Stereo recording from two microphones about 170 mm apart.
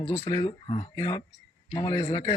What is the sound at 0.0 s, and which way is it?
A man's voice, 20° left (ahead or behind).